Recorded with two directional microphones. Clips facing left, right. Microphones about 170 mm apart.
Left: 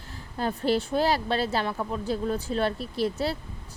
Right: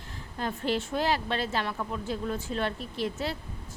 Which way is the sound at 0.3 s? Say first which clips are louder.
Left 4 dB; 35° left (ahead or behind).